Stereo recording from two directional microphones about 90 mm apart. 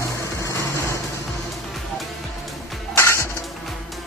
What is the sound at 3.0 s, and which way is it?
Music, 30° left (ahead or behind).